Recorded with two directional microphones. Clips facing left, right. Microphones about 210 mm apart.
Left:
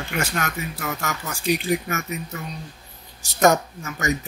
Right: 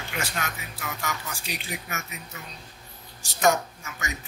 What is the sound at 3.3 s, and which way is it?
Speech, 45° left (ahead or behind).